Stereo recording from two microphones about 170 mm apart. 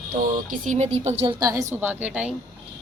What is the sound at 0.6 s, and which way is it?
Speech, 45° right (ahead or behind).